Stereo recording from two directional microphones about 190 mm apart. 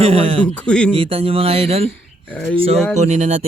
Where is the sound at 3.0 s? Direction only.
35° right (ahead or behind).